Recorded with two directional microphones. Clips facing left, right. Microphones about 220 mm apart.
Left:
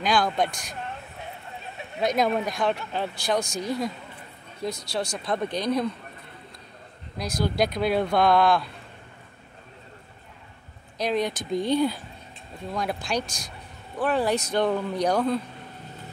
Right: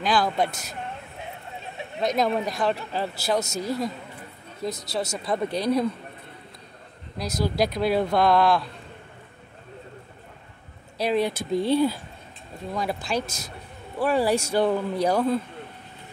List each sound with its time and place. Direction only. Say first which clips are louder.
0.0 s speech: even; 5° right (ahead or behind)
2.0 s speech: even; centre (ahead or behind)
4.6 s speech: right 1 dB; 20° right (ahead or behind)
5.1 s a man's voice: right 3 dB; 5° right (ahead or behind)
7.3 s speech: right 1 dB; centre (ahead or behind)
11.0 s a man's voice: right 2 dB; 5° right (ahead or behind)